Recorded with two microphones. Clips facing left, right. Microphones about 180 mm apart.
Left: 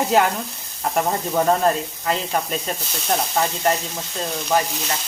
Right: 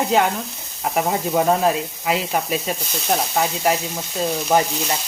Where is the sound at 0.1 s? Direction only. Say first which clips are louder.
Left 1 dB; centre (ahead or behind).